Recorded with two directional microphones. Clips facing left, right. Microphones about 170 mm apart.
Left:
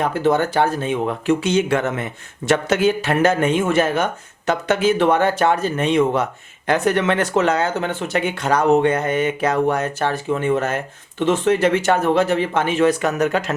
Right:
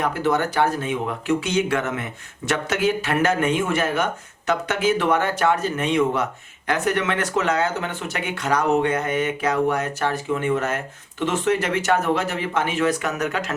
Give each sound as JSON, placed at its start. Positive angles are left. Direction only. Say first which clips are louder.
{"t": 0.1, "sound": "speech", "louder": "left 4 dB", "side_deg": 30}
{"t": 2.5, "sound": "speech", "louder": "left 5 dB", "side_deg": 30}